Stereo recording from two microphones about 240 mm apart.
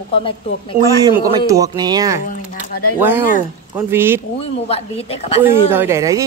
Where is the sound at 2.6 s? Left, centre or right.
Left.